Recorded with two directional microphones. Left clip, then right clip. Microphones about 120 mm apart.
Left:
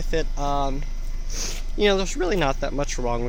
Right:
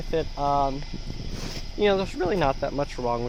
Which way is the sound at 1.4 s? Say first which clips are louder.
Left 2 dB; 15° left (ahead or behind).